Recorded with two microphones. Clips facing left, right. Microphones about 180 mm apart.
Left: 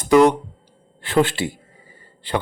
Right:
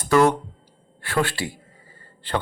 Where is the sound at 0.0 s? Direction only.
15° left (ahead or behind).